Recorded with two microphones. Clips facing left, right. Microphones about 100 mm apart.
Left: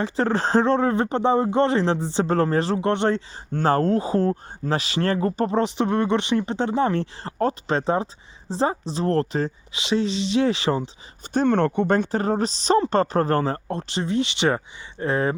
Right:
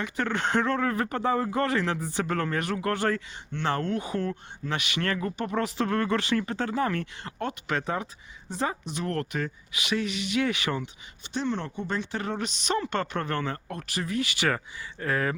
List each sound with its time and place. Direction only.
0.0 s speech: 30° left (ahead or behind)
3.5 s speech: 40° left (ahead or behind)
11.3 s speech: 55° left (ahead or behind)
12.1 s speech: 40° left (ahead or behind)